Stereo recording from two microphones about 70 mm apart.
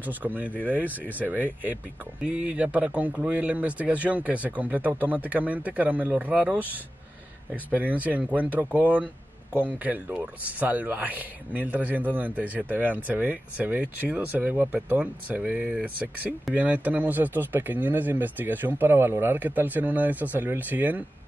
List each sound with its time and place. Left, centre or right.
0.0 s speech: right